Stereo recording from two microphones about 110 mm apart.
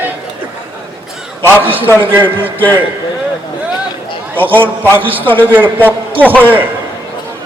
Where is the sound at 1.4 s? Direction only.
20° right (ahead or behind).